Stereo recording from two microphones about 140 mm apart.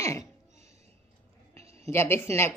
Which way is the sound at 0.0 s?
20° left (ahead or behind).